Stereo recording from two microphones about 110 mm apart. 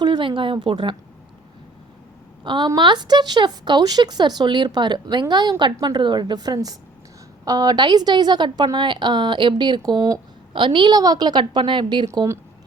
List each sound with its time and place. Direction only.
0.0 s speech: 45° right (ahead or behind)
2.4 s a woman's voice: 45° right (ahead or behind)
10.5 s a woman's voice: 50° right (ahead or behind)
12.1 s a woman's voice: 30° right (ahead or behind)